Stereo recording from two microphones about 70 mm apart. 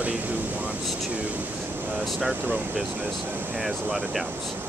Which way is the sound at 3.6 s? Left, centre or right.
Centre.